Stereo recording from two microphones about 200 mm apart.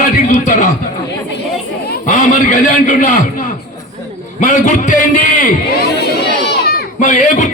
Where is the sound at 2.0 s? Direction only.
35° left (ahead or behind).